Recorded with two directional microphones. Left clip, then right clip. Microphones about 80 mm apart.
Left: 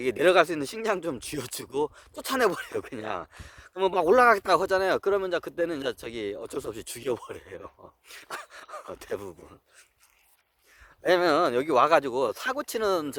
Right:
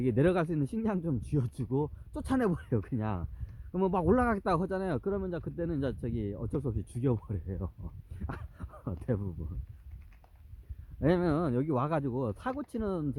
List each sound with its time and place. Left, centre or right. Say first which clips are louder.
0.0 s speech: left 8 dB; right
1.7 s speech: left 5 dB; right
11.0 s speech: left 8 dB; right; by 13.1 s centre